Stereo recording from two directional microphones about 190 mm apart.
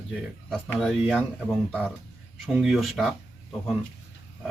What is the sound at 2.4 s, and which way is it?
Speech, centre (ahead or behind).